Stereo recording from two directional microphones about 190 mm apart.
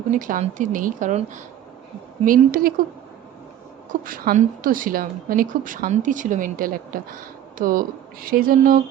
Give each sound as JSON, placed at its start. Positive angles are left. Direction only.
{"t": 0.1, "sound": "a woman's voice", "side_deg": -45}
{"t": 4.0, "sound": "a woman's voice", "side_deg": -50}